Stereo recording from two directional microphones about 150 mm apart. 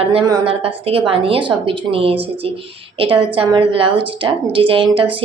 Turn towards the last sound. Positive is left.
turn(degrees=-35)  # may be behind; listen again after turning